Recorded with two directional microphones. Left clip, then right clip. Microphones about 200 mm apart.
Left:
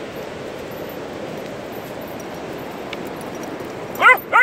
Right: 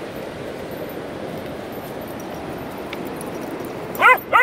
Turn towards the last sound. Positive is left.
turn(degrees=-40)  # may be behind; listen again after turning